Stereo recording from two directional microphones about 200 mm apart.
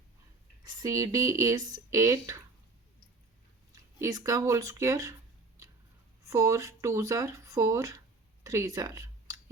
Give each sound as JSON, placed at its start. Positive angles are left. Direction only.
{"t": 0.6, "sound": "speech", "side_deg": -20}
{"t": 3.9, "sound": "speech", "side_deg": -15}
{"t": 6.2, "sound": "speech", "side_deg": -15}